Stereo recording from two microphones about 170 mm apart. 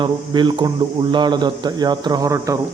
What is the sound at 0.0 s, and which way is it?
A man's voice, 25° right (ahead or behind).